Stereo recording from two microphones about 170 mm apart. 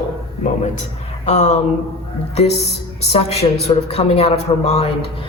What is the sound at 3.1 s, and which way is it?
A man's voice, 40° left (ahead or behind).